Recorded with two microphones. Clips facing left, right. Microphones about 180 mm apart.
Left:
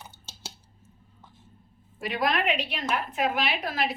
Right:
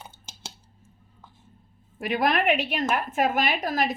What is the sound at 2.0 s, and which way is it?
A woman's voice, 55° right (ahead or behind).